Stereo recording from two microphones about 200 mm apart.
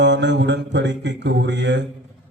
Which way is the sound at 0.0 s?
60° right (ahead or behind).